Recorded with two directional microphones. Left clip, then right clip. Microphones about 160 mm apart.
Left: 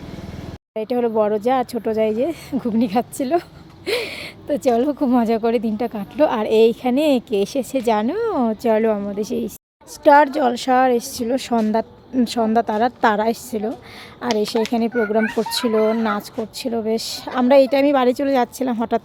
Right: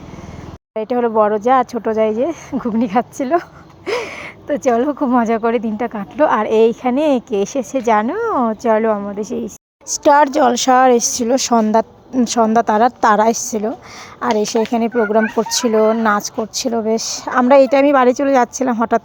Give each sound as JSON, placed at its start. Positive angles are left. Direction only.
{"t": 0.7, "sound": "speech", "side_deg": 0}
{"t": 9.9, "sound": "speech", "side_deg": -15}